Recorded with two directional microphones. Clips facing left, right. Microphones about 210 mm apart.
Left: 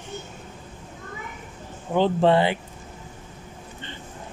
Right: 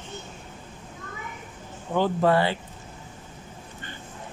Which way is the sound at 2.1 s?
20° left (ahead or behind).